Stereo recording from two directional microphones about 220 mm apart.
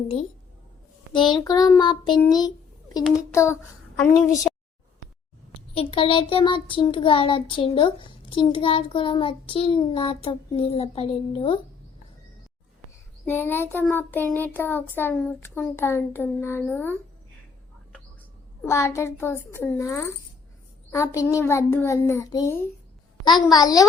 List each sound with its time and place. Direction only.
1.1 s child singing: 20° left (ahead or behind)
4.5 s a sound: 5° left (ahead or behind)
5.7 s child singing: 25° left (ahead or behind)
13.2 s child singing: 10° left (ahead or behind)
18.6 s child singing: 10° left (ahead or behind)